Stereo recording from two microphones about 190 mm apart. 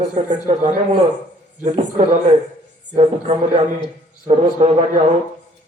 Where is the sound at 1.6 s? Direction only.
40° right (ahead or behind).